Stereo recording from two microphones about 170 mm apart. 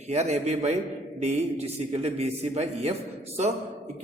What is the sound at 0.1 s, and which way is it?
A man's voice, 40° right (ahead or behind).